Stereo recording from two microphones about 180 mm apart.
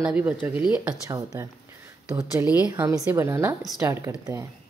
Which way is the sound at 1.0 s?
20° right (ahead or behind).